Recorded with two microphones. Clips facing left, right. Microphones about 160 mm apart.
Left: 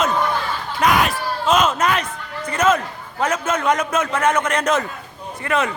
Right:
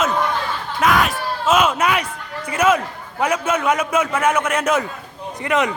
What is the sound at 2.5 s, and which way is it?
A man's voice, 10° right (ahead or behind).